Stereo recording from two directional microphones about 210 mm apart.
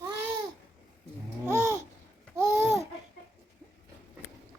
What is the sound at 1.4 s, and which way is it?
Babbling, 10° right (ahead or behind).